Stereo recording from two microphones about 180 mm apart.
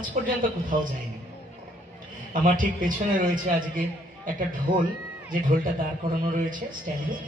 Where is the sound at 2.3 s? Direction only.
45° right (ahead or behind).